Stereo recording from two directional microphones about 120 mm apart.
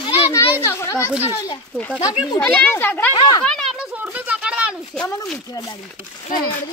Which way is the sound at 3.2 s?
35° left (ahead or behind).